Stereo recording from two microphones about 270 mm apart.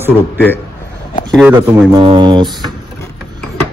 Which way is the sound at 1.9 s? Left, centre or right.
Centre.